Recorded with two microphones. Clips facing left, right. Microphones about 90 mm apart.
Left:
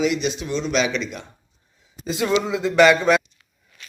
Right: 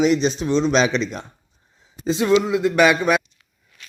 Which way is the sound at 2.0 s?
25° right (ahead or behind).